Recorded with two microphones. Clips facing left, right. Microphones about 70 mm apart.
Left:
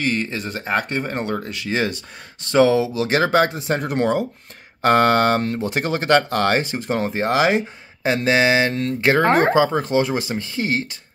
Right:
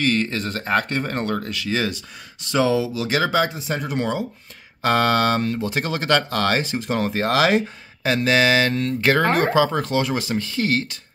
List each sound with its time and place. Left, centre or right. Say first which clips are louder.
0.0 s speech: right 1 dB; centre